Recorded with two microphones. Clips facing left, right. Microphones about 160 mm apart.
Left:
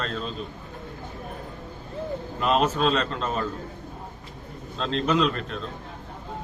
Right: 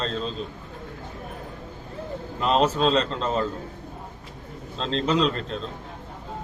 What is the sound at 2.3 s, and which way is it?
A man's voice, 30° right (ahead or behind).